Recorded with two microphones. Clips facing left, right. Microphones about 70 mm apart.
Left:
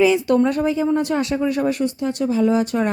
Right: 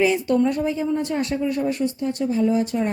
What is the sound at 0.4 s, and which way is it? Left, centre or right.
Speech, left.